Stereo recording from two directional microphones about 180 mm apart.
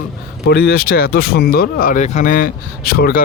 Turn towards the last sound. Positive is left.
turn(degrees=55)  # may be behind; listen again after turning